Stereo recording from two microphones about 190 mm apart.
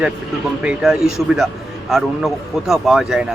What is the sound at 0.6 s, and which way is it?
Speech, 5° right (ahead or behind).